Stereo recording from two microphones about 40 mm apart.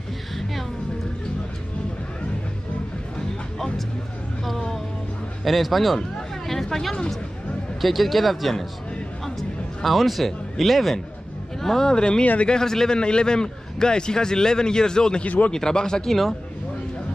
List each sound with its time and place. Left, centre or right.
3.5 s music: centre
5.4 s speech: centre
6.4 s a sound: centre
7.8 s speech: centre
9.2 s a sound: centre
11.6 s speech: centre
11.9 s a man's voice: left
15.2 s speech: left
15.5 s speech: centre